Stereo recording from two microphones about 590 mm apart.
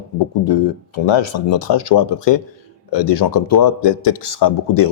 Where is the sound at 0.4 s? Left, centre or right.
Left.